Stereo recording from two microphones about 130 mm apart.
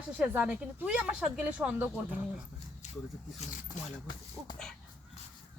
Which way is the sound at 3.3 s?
65° left (ahead or behind).